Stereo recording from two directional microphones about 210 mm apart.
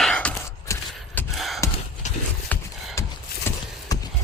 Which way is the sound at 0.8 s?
5° left (ahead or behind).